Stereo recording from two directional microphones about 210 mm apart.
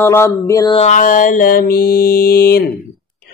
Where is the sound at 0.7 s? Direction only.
35° left (ahead or behind).